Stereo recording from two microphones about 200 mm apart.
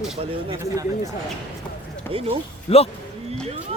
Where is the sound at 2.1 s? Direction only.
30° right (ahead or behind).